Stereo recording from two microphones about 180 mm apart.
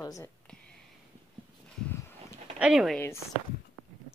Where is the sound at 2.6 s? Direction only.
5° right (ahead or behind).